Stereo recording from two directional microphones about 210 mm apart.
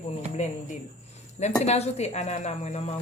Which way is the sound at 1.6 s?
30° left (ahead or behind).